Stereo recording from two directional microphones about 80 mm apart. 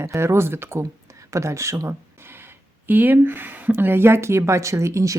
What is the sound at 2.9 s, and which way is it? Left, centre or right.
Speech, right.